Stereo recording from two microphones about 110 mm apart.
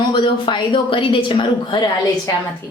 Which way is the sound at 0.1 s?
50° left (ahead or behind).